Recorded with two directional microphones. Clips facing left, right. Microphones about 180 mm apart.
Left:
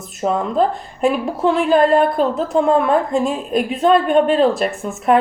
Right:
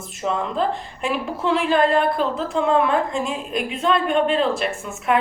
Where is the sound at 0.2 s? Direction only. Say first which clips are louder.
Left 6 dB; 40° left (ahead or behind).